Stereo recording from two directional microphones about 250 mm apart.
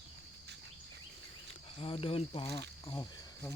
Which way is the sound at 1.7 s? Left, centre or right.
Left.